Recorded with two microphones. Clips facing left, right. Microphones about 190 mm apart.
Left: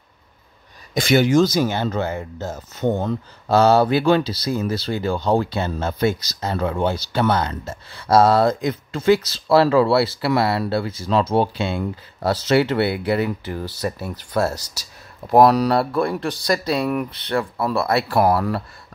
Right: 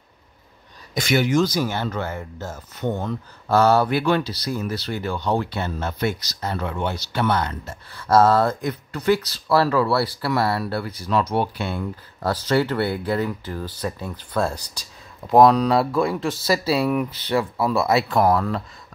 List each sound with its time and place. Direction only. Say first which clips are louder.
0.9 s speech: left 4 dB; 30° left (ahead or behind)
8.1 s speech: left 2 dB; 15° left (ahead or behind)
9.1 s speech: left 3 dB; 90° left
9.5 s speech: left 4 dB; 25° left (ahead or behind)
11.5 s speech: left 4 dB; 90° left
12.4 s speech: left 3 dB; 20° left (ahead or behind)